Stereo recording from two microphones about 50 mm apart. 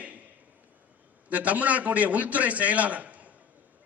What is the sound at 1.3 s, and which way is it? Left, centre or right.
A man's voice, right.